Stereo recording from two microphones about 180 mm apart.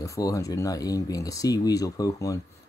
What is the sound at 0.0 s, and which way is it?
Speech, 15° left (ahead or behind).